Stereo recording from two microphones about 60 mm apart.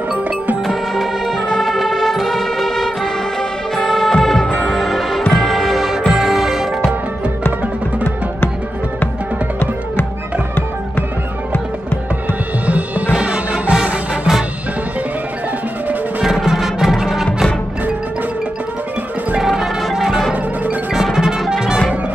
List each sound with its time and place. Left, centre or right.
0.7 s music: centre
12.6 s music: right
16.4 s music: centre
19.3 s music: centre